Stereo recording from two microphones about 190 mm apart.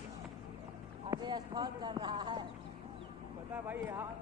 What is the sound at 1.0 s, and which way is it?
Speech, 20° right (ahead or behind).